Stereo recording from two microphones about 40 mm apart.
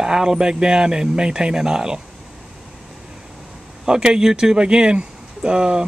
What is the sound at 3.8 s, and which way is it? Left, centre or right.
Speech, centre.